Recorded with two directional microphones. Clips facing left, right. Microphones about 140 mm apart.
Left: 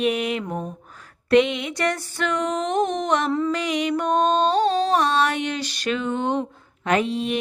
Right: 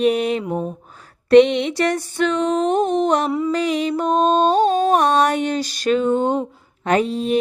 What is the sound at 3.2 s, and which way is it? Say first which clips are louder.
Speech: right 2 dB; 10° right (ahead or behind).